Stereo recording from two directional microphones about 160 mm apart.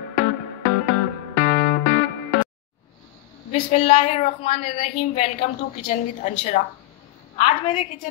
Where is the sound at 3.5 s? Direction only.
45° left (ahead or behind).